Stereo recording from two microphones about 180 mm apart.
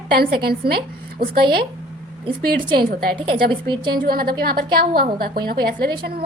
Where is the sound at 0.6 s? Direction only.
55° right (ahead or behind).